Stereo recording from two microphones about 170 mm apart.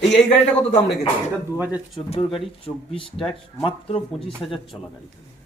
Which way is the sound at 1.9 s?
30° left (ahead or behind).